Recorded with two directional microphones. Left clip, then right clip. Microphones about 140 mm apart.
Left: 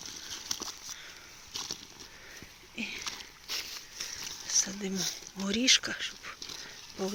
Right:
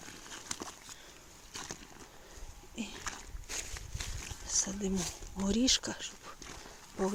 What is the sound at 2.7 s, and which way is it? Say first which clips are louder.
Splash: left 5 dB; 25° right (ahead or behind).